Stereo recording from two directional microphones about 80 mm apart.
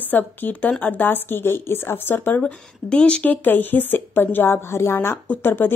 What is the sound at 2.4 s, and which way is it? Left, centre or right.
Speech, centre.